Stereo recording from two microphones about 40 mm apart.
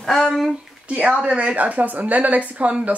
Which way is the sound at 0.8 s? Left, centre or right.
Right.